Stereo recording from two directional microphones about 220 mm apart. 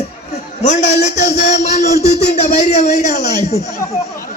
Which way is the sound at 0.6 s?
30° left (ahead or behind).